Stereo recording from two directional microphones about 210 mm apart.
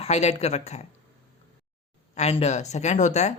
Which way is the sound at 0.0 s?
30° left (ahead or behind).